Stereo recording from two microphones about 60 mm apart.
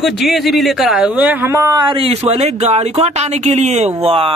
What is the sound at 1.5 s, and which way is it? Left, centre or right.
Speech, right.